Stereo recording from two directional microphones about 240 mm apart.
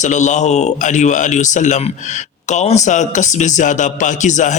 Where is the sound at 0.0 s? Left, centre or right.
Left.